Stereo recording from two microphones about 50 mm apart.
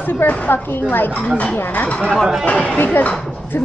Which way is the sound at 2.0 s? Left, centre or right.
Centre.